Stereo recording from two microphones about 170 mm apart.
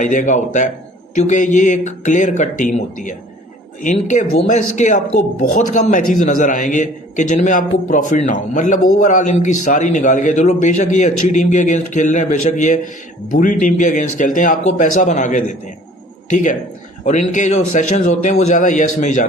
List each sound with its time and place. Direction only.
0.0 s a man's voice: 50° left (ahead or behind)